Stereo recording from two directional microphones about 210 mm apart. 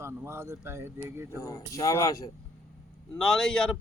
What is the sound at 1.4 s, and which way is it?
Speech, 15° left (ahead or behind).